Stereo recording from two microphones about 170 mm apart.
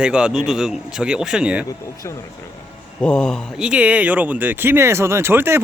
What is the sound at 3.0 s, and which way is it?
Speech, 5° left (ahead or behind).